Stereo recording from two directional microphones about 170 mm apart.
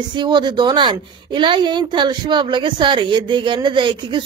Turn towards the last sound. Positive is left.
turn(degrees=-30)  # may be behind; listen again after turning